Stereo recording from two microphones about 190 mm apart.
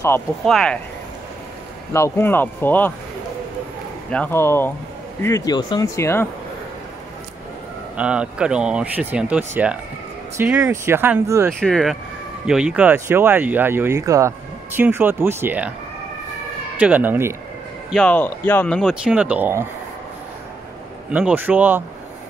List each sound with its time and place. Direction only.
0.5 s speech: centre (ahead or behind)
1.9 s speech: 15° left (ahead or behind)
4.1 s speech: 10° left (ahead or behind)
7.9 s speech: 5° right (ahead or behind)
11.6 s speech: centre (ahead or behind)
16.7 s speech: 10° right (ahead or behind)
17.9 s speech: 5° left (ahead or behind)
21.1 s speech: 5° right (ahead or behind)